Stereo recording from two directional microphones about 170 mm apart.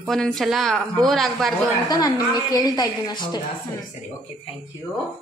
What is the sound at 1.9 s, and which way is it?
A woman's voice, 20° left (ahead or behind).